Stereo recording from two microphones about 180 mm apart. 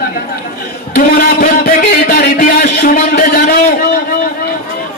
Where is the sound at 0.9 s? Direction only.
55° left (ahead or behind).